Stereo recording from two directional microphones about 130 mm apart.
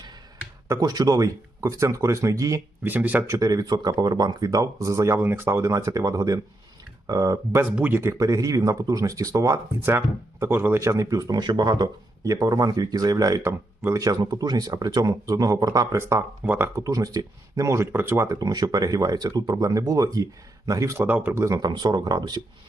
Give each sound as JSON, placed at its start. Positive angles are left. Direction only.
{"t": 0.7, "sound": "speech", "side_deg": -30}
{"t": 2.9, "sound": "speech", "side_deg": -15}
{"t": 7.6, "sound": "speech", "side_deg": -15}
{"t": 8.2, "sound": "speech", "side_deg": -25}
{"t": 21.7, "sound": "speech", "side_deg": -35}